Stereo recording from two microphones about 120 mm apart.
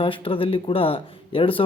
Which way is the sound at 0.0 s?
45° left (ahead or behind).